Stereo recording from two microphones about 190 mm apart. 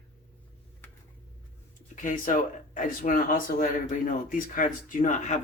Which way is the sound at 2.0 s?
40° left (ahead or behind).